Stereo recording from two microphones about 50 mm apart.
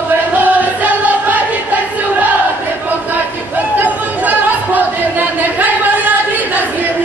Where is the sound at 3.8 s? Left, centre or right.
Right.